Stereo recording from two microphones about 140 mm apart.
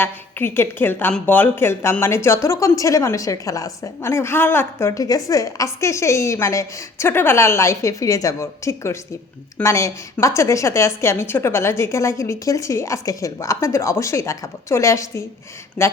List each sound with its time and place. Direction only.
0.0 s a woman's voice: 15° left (ahead or behind)